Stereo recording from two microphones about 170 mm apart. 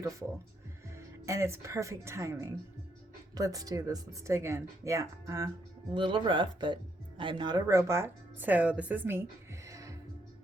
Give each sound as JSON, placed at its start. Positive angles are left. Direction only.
{"t": 0.9, "sound": "speech", "side_deg": -15}